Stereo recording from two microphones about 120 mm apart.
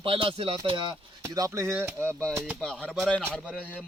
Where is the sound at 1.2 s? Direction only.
25° right (ahead or behind).